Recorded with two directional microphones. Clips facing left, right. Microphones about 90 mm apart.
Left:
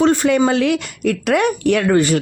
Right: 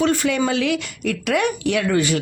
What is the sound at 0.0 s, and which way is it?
Speech, 35° left (ahead or behind).